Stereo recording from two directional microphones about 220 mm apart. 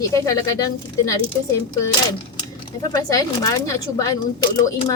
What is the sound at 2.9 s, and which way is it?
Speech, 15° left (ahead or behind).